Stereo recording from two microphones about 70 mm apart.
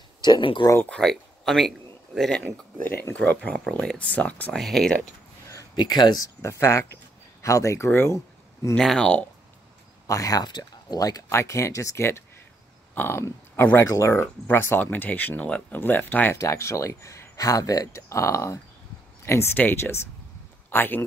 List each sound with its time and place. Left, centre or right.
0.2 s speech: left
0.8 s speech: centre
3.3 s speech: centre
4.6 s speech: centre
5.8 s speech: left
8.7 s speech: centre
10.0 s speech: left
10.4 s speech: left
11.2 s speech: left
12.9 s speech: left
16.3 s speech: left